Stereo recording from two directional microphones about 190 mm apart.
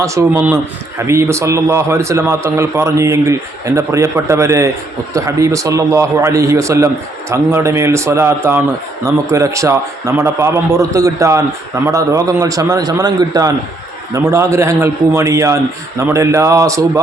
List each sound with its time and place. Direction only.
0.0 s a man's voice: 15° right (ahead or behind)